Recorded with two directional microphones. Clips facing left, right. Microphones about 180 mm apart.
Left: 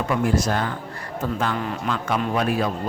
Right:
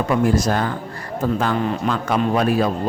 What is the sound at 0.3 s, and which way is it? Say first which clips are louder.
Speech: right 3 dB; 40° right (ahead or behind).